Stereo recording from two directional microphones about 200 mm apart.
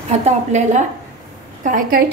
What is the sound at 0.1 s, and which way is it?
A woman's voice, 35° right (ahead or behind).